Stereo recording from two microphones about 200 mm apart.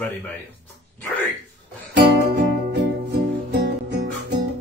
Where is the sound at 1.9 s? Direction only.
60° right (ahead or behind).